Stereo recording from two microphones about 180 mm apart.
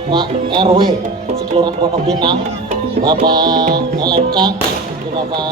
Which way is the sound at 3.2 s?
25° right (ahead or behind).